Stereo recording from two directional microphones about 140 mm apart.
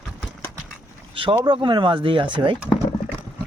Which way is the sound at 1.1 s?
35° right (ahead or behind).